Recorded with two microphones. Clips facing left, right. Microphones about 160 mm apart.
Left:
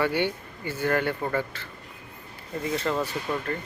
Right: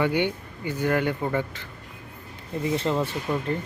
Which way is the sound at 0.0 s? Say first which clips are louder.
Right 2 dB; 15° right (ahead or behind).